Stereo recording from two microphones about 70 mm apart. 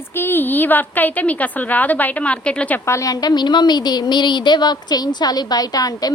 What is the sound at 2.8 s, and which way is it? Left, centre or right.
Speech, left.